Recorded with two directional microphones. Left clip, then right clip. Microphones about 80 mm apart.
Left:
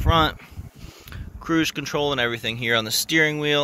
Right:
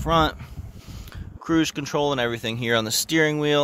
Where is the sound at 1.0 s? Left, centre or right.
Right.